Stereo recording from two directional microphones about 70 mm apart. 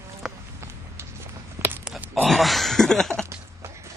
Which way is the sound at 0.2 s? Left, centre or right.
Centre.